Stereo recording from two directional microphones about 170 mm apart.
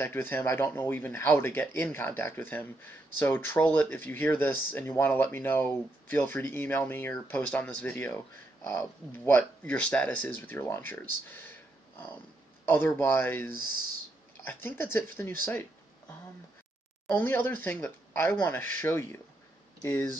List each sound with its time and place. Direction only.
0.0 s speech: 10° left (ahead or behind)
12.6 s speech: 10° left (ahead or behind)
17.1 s speech: 10° left (ahead or behind)